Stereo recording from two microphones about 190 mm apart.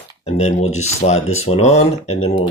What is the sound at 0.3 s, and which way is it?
Speech, 35° left (ahead or behind).